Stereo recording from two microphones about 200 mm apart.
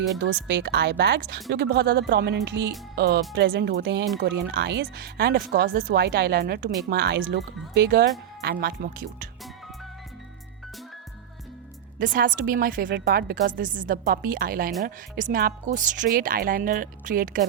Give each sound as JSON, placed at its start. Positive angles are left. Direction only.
{"t": 0.4, "sound": "speech", "side_deg": -60}
{"t": 12.1, "sound": "speech", "side_deg": -45}